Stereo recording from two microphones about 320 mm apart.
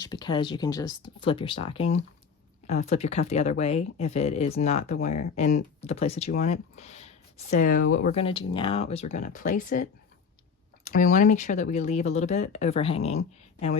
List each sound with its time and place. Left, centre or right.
0.0 s speech: centre